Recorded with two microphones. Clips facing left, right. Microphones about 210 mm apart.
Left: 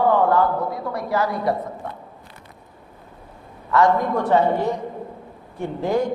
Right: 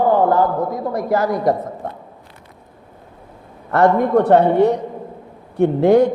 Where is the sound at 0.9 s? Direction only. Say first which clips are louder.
Right 5 dB; 45° right (ahead or behind).